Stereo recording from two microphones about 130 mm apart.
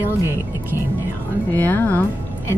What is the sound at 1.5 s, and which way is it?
Speech, 15° left (ahead or behind).